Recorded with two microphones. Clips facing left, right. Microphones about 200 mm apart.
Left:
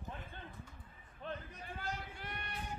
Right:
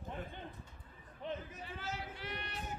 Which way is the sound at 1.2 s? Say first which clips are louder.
Right 2 dB; 15° right (ahead or behind).